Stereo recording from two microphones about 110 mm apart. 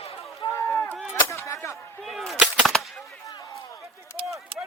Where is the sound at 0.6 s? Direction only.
20° left (ahead or behind).